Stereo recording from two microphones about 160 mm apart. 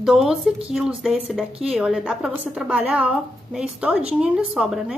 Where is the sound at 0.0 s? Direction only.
5° right (ahead or behind).